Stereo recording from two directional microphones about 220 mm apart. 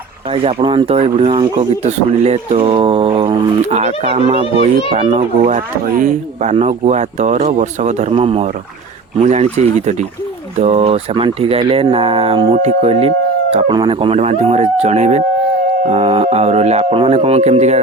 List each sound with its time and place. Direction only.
0.3 s speech: 25° right (ahead or behind)